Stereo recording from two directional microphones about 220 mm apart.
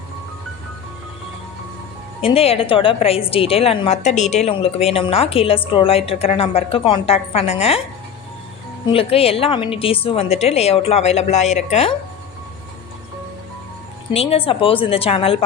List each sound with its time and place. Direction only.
2.2 s a woman's voice: 25° left (ahead or behind)
8.9 s a woman's voice: 25° left (ahead or behind)
14.1 s a woman's voice: 25° left (ahead or behind)